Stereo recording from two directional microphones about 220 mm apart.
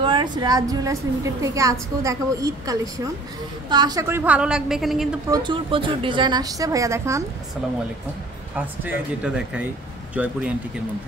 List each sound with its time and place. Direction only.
0.0 s a woman's voice: 20° right (ahead or behind); by 5.1 s centre (ahead or behind)
5.3 s a woman's voice: 20° right (ahead or behind)
8.5 s a woman's voice: 5° right (ahead or behind)